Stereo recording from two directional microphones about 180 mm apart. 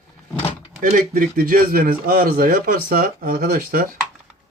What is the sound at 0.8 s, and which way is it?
Speech, 50° right (ahead or behind).